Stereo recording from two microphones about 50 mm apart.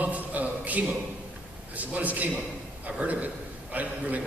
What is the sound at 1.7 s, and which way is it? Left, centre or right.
A man's voice, right.